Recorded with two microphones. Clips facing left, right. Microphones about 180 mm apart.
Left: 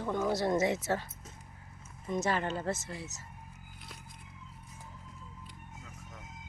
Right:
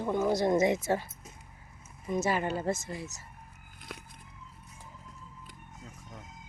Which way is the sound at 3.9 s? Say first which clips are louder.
Right 9 dB; 65° right (ahead or behind).